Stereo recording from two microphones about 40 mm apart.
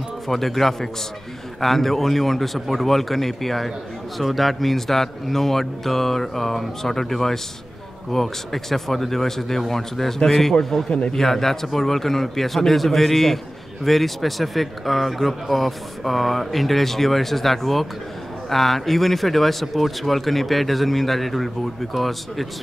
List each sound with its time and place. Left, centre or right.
0.3 s speech: centre
10.9 s a man's voice: left
11.1 s speech: centre